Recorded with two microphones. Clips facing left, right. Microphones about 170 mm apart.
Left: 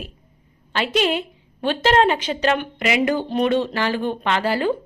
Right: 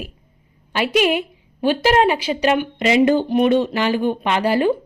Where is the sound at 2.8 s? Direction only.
25° right (ahead or behind).